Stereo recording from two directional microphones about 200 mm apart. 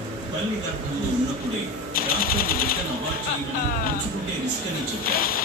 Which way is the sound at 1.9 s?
45° left (ahead or behind).